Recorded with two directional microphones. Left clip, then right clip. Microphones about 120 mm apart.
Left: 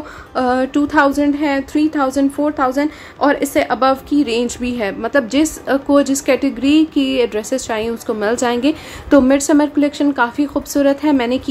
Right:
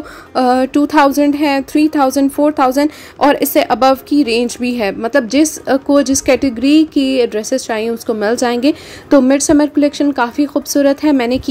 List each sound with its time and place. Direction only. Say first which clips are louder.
0.3 s speech: right 4 dB; 55° right (ahead or behind)